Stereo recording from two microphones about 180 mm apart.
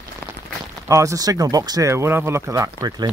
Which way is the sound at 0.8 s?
15° right (ahead or behind).